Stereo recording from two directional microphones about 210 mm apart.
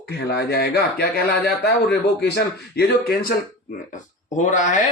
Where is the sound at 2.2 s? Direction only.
50° left (ahead or behind).